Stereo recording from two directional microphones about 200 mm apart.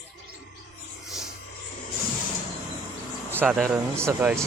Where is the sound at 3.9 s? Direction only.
15° right (ahead or behind).